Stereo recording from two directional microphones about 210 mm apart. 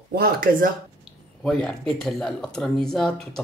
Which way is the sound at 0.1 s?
45° right (ahead or behind).